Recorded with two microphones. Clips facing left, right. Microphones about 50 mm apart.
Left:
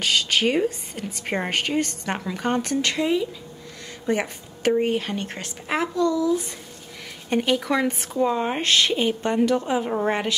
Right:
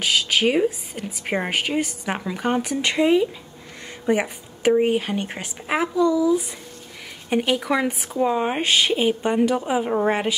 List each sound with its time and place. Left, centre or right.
0.0 s speech: centre
2.9 s speech: right